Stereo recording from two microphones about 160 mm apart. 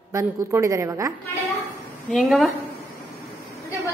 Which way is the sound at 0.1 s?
20° right (ahead or behind).